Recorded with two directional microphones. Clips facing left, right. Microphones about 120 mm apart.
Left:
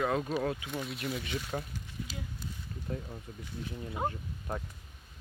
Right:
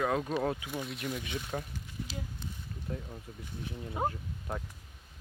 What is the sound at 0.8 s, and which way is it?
Speech, centre (ahead or behind).